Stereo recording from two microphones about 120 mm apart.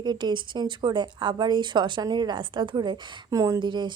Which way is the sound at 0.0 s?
35° right (ahead or behind).